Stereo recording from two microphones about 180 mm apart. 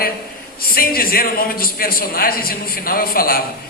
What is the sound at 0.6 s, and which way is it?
A man's voice, 55° left (ahead or behind).